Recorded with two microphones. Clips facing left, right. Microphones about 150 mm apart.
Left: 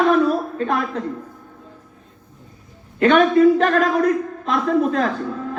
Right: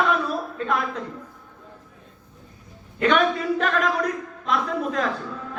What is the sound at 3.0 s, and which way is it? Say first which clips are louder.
A man's voice: left 8 dB; 45° left (ahead or behind).